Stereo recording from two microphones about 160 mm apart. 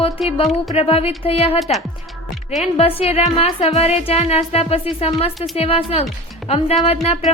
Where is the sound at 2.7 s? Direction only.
35° left (ahead or behind).